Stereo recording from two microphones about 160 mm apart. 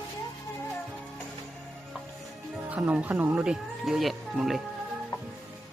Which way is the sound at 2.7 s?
10° right (ahead or behind).